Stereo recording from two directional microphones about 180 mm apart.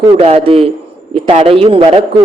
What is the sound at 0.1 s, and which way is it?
A man's voice, 30° right (ahead or behind).